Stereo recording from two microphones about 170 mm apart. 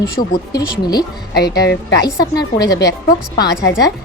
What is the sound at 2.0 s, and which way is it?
Speech, 20° left (ahead or behind).